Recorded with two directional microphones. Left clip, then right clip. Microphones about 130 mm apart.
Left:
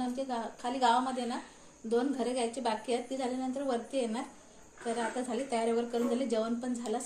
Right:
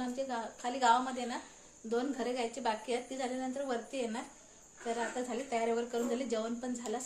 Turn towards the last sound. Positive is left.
turn(degrees=-15)  # may be behind; listen again after turning